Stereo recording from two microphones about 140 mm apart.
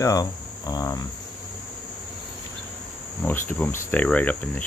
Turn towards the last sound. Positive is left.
turn(degrees=10)  # may be behind; listen again after turning